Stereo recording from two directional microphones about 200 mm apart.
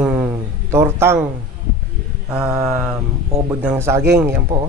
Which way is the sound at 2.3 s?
5° right (ahead or behind).